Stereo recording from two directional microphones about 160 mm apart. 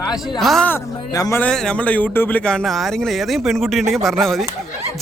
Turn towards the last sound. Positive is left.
turn(degrees=0)  # may be behind; listen again after turning